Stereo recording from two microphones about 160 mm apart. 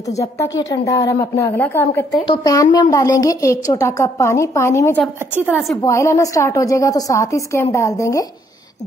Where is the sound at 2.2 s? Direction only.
25° left (ahead or behind).